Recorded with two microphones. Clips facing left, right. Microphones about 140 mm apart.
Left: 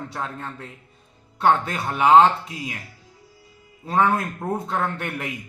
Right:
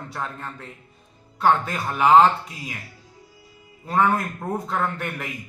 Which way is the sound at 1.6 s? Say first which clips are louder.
Even; centre (ahead or behind).